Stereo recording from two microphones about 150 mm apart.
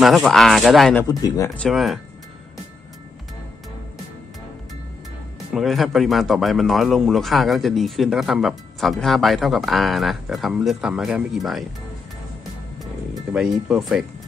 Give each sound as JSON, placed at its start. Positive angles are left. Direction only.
{"t": 0.0, "sound": "speech", "side_deg": 0}
{"t": 1.0, "sound": "speech", "side_deg": 25}
{"t": 1.6, "sound": "speech", "side_deg": 0}
{"t": 5.5, "sound": "speech", "side_deg": 0}
{"t": 13.3, "sound": "speech", "side_deg": -5}